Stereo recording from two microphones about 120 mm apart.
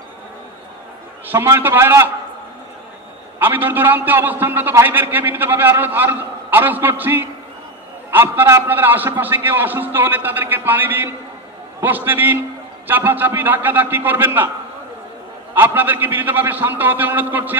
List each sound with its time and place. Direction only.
1.3 s a man's voice: 20° right (ahead or behind)
3.3 s a man's voice: 15° right (ahead or behind)
15.5 s a man's voice: 15° right (ahead or behind)